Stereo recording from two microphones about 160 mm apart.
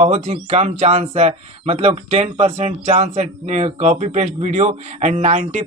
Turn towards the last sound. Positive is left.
turn(degrees=-45)  # may be behind; listen again after turning